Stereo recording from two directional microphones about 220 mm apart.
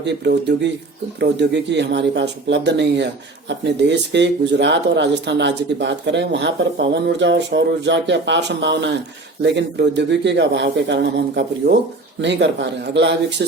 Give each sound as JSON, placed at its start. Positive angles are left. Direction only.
{"t": 0.0, "sound": "speech", "side_deg": -50}